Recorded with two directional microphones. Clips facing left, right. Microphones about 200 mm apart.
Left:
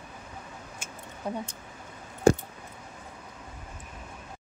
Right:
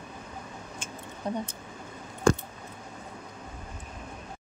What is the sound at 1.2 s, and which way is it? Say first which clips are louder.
Speech: right 1 dB; 5° left (ahead or behind).